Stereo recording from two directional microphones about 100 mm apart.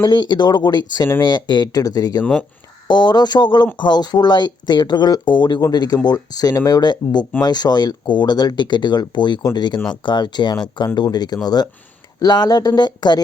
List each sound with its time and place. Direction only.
0.0 s speech: 50° left (ahead or behind)